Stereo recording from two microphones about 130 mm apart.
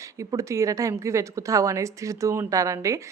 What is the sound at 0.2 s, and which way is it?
A woman's voice, 25° right (ahead or behind).